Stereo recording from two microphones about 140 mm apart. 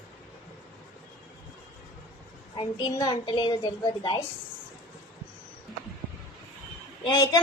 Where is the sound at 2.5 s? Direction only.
30° left (ahead or behind).